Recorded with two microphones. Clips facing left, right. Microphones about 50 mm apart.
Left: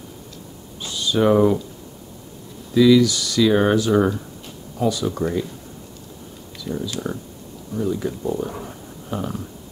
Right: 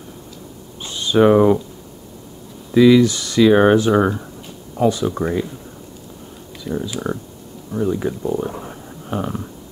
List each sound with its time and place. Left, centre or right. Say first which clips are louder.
0.8 s speech: right 4 dB; right
2.7 s speech: right 3 dB; right
6.6 s speech: right 3 dB; right
9.1 s speech: right 3 dB; right